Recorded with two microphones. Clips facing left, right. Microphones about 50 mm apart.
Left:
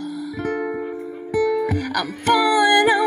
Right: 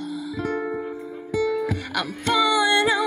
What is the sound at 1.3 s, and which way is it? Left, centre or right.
Music, left.